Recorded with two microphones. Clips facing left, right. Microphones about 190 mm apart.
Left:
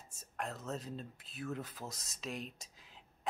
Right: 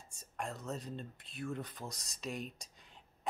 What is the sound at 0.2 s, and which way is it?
Speech, centre (ahead or behind).